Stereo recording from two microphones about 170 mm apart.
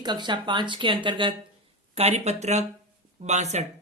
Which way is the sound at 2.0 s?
40° right (ahead or behind).